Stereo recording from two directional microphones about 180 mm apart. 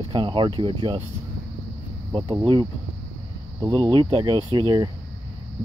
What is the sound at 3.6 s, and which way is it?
Speech, 25° right (ahead or behind).